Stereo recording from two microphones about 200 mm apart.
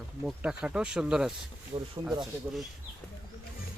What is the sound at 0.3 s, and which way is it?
Speech, 5° right (ahead or behind).